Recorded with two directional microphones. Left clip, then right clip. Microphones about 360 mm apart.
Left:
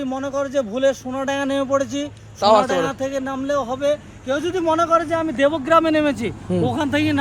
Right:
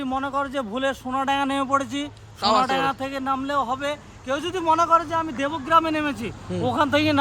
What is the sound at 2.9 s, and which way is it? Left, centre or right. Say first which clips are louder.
Speech: left 1 dB; centre.